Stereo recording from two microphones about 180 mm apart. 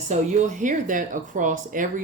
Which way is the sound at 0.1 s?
40° right (ahead or behind).